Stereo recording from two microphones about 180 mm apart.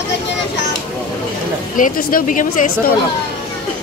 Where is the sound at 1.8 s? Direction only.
50° left (ahead or behind).